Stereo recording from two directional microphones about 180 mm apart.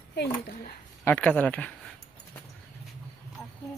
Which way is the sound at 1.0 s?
10° left (ahead or behind).